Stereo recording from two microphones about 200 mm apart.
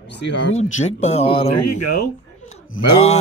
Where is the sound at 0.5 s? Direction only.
35° left (ahead or behind).